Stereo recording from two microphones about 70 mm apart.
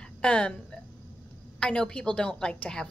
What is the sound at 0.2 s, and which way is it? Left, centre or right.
A woman's voice, centre.